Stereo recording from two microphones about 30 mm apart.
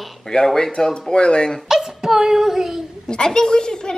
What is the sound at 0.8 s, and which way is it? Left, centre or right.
Speech, centre.